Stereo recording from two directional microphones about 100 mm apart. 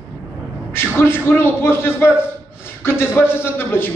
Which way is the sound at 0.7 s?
25° left (ahead or behind).